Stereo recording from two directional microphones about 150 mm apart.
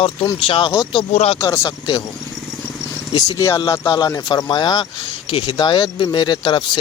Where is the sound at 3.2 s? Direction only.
20° left (ahead or behind).